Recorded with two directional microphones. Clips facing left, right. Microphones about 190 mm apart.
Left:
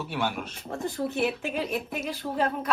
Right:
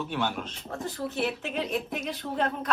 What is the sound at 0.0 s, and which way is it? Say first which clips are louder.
Speech: even; 10° left (ahead or behind).